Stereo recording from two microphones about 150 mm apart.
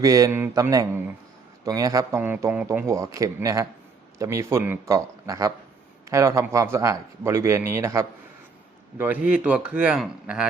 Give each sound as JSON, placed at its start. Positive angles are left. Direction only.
{"t": 0.0, "sound": "a man's voice", "side_deg": -20}